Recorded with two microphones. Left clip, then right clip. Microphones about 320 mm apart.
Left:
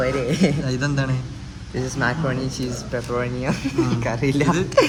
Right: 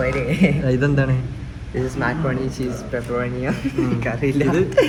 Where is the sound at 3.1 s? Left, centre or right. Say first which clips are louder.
Even; left.